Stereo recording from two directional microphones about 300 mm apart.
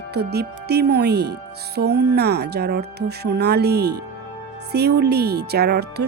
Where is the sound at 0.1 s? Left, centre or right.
Right.